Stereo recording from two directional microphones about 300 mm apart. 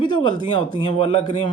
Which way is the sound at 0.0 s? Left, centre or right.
Centre.